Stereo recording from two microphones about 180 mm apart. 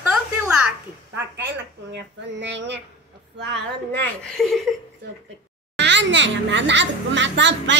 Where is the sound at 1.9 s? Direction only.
80° right.